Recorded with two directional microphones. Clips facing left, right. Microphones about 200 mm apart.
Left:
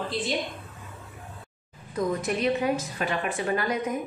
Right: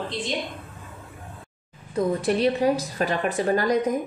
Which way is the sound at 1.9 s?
30° right (ahead or behind).